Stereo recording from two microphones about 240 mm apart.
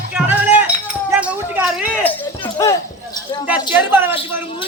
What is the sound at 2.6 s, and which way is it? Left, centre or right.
Basketball bounce, centre.